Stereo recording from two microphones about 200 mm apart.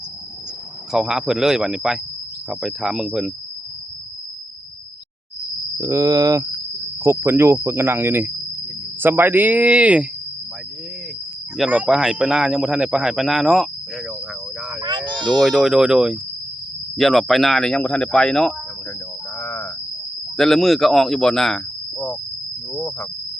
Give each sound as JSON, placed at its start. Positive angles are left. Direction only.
{"t": 0.9, "sound": "speech", "side_deg": 0}
{"t": 5.7, "sound": "speech", "side_deg": -10}
{"t": 11.5, "sound": "speech", "side_deg": -5}
{"t": 14.8, "sound": "a sound", "side_deg": -20}
{"t": 15.2, "sound": "speech", "side_deg": 0}
{"t": 19.4, "sound": "a sound", "side_deg": 15}
{"t": 20.3, "sound": "speech", "side_deg": 0}
{"t": 22.7, "sound": "cricket", "side_deg": 10}